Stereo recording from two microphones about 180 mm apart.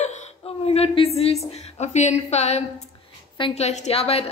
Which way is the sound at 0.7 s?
35° left (ahead or behind).